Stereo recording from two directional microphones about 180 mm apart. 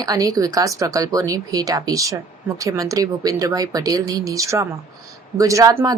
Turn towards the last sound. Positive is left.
turn(degrees=-20)  # may be behind; listen again after turning